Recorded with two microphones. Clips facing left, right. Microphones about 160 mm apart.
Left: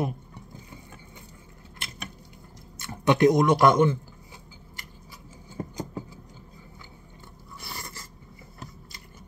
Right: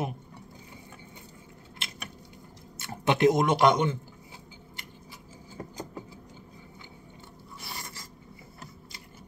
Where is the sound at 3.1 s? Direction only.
25° right (ahead or behind).